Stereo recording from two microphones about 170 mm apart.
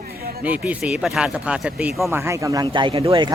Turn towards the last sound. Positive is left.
turn(degrees=-30)  # may be behind; listen again after turning